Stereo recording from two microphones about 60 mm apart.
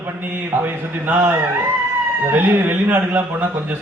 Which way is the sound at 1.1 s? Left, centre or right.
Right.